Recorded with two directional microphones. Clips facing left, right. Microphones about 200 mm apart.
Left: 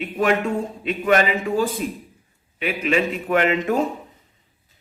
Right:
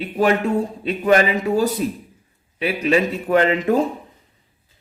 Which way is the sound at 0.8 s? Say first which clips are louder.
Right 2 dB; 35° right (ahead or behind).